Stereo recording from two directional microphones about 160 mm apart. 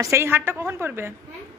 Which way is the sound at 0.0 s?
15° right (ahead or behind).